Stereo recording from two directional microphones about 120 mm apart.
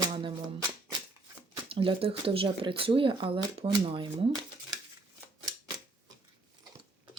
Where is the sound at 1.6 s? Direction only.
50° right (ahead or behind).